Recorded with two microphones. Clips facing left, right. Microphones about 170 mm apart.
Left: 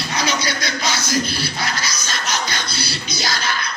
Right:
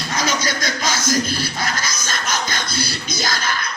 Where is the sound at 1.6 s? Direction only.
50° right (ahead or behind).